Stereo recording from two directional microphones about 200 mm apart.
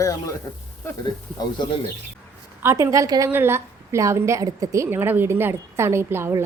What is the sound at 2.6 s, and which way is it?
A woman's voice, 15° right (ahead or behind).